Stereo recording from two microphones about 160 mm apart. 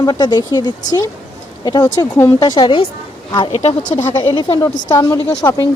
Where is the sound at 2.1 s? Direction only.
15° left (ahead or behind).